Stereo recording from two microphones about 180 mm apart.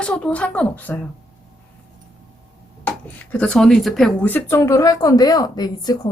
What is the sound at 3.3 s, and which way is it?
A woman's voice, 5° left (ahead or behind).